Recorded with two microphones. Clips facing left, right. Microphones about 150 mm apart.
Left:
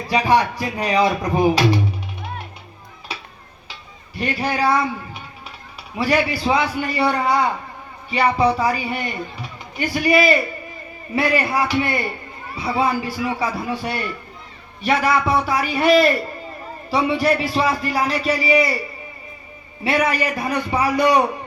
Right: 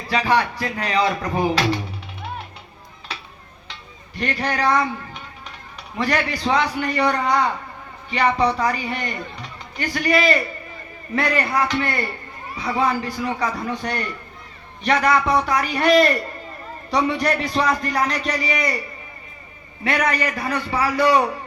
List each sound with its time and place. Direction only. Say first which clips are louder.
0.1 s a man's voice: left 2 dB; 15° left (ahead or behind)
3.1 s tick-tock: left 2 dB; 10° left (ahead or behind)
3.7 s music: left 1 dB; 10° left (ahead or behind)
6.0 s a man's voice: left 3 dB; 10° left (ahead or behind)
19.8 s a man's voice: left 2 dB; 10° left (ahead or behind)